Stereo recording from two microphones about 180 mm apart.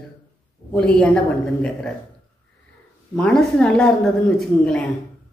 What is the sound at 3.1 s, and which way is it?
Speech, 5° left (ahead or behind).